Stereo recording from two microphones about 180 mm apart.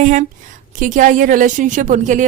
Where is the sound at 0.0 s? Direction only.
45° right (ahead or behind).